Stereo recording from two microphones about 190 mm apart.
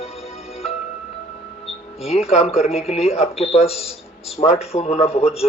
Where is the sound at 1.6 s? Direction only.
30° left (ahead or behind).